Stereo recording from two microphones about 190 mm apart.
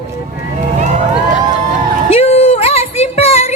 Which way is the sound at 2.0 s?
30° left (ahead or behind).